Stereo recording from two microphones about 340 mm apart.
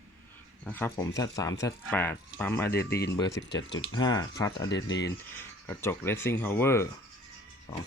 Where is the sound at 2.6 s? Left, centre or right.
Left.